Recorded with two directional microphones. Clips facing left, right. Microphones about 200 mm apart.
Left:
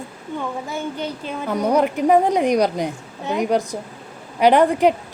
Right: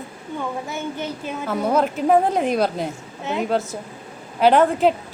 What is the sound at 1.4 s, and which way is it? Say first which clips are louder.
A woman's voice: left 2 dB; 15° left (ahead or behind).